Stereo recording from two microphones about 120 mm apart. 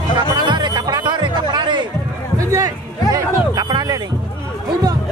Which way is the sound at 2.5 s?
30° right (ahead or behind).